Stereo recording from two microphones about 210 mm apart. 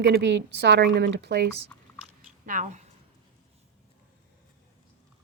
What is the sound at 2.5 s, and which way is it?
Speech, 35° right (ahead or behind).